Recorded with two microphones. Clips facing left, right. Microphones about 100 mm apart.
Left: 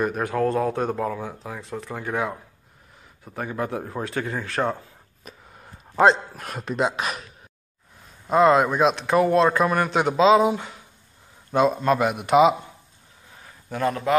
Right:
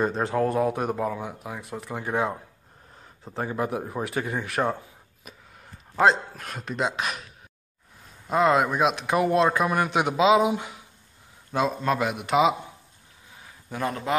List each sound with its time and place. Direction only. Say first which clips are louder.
0.0 s a man's voice: left 1 dB; 25° right (ahead or behind)
5.2 s a sound: left 3 dB; 5° right (ahead or behind)
5.9 s a man's voice: left 3 dB; centre (ahead or behind)
8.3 s a man's voice: left 4 dB; centre (ahead or behind)
11.5 s a man's voice: left 5 dB; centre (ahead or behind)
13.4 s a sound: left 4 dB; 15° right (ahead or behind)